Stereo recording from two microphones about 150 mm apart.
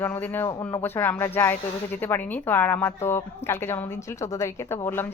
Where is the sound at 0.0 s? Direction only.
15° left (ahead or behind).